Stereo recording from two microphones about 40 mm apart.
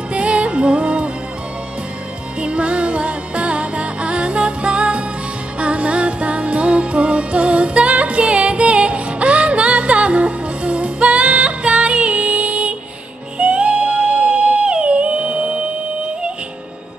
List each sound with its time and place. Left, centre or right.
0.1 s music: right
2.4 s music: right